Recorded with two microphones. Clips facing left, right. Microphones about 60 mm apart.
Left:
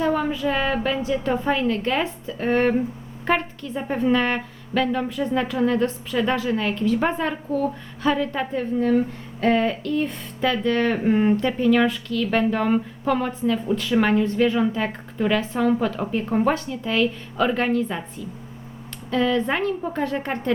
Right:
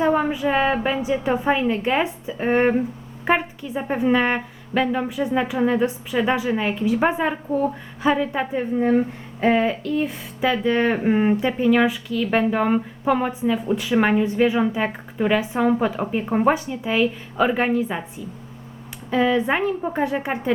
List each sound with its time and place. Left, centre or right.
0.0 s a woman's voice: right
8.7 s a woman's voice: right
9.5 s speech: centre
19.1 s speech: centre